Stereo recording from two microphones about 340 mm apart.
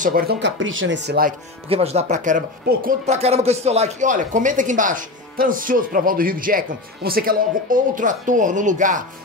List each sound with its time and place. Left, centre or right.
0.0 s speech: right